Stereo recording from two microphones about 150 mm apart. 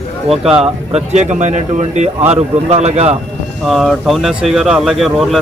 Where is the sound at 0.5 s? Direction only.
45° right (ahead or behind).